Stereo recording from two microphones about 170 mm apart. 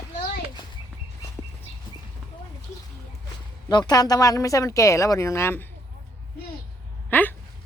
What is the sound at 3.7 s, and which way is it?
Speech, 25° left (ahead or behind).